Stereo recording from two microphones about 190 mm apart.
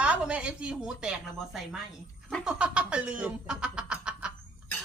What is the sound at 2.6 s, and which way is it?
Speech, 5° right (ahead or behind).